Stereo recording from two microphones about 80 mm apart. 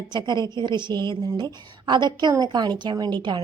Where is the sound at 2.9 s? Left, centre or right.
Right.